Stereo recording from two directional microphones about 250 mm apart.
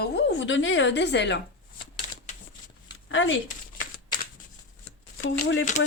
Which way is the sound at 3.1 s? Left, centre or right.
Left.